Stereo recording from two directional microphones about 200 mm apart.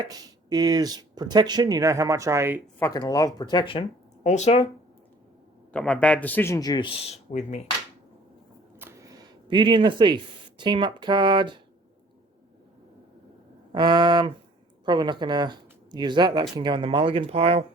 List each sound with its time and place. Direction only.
0.0 s speech: 20° right (ahead or behind)
2.7 s speech: 15° left (ahead or behind)
5.7 s speech: 5° left (ahead or behind); by 7.6 s 35° left (ahead or behind)
8.8 s a sound: 15° right (ahead or behind)
10.6 s speech: 25° right (ahead or behind)
13.7 s speech: 20° right (ahead or behind)